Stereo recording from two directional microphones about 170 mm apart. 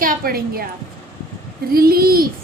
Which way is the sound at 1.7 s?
60° right (ahead or behind).